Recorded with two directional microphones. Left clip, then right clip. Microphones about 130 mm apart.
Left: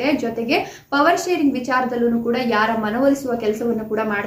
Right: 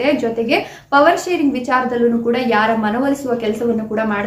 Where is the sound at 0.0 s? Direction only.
15° right (ahead or behind).